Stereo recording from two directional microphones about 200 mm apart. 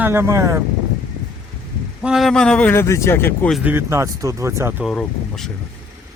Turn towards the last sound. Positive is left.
turn(degrees=0)  # may be behind; listen again after turning